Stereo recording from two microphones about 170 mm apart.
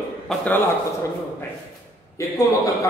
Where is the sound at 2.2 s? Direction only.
20° left (ahead or behind).